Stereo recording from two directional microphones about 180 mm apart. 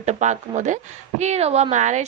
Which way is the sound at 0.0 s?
40° right (ahead or behind).